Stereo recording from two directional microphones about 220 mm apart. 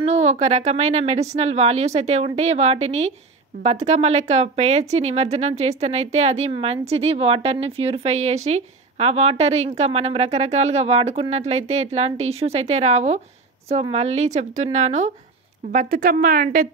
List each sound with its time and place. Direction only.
0.0 s a woman's voice: 30° right (ahead or behind)